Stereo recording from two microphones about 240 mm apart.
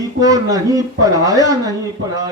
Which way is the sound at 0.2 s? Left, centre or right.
Centre.